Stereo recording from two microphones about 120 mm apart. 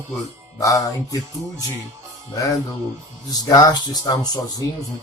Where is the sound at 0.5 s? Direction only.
30° left (ahead or behind).